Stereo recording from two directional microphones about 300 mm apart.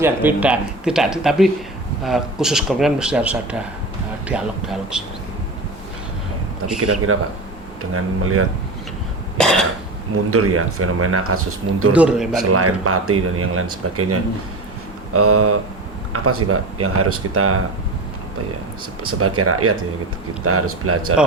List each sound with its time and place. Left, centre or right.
0.0 s speech: centre
6.7 s speech: right
9.4 s cough: centre
10.2 s speech: right
11.9 s speech: centre
12.5 s speech: right
19.4 s speech: right